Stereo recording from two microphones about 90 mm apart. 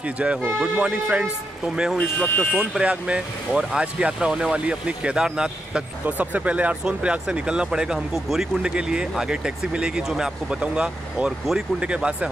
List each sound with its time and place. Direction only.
0.0 s speech: 10° right (ahead or behind)
2.1 s speech: 15° left (ahead or behind)
2.8 s speech: 10° right (ahead or behind)